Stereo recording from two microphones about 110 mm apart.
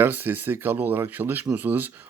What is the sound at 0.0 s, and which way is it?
Speech, 15° right (ahead or behind).